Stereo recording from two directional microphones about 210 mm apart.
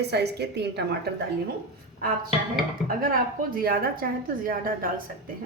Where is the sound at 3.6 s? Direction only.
45° right (ahead or behind).